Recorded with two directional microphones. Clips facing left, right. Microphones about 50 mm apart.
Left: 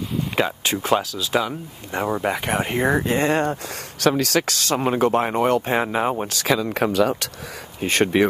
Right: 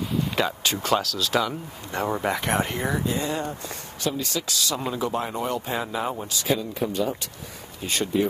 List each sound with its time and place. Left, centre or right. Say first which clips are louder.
0.7 s speech: left 3 dB; centre
2.7 s speech: left 6 dB; left
6.2 s speech: left 4 dB; left
7.8 s speech: left 8 dB; left